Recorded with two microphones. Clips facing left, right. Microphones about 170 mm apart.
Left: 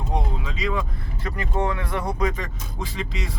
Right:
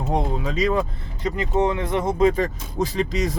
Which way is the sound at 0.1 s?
45° right (ahead or behind).